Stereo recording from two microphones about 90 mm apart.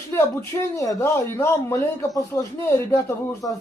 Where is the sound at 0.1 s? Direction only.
30° left (ahead or behind).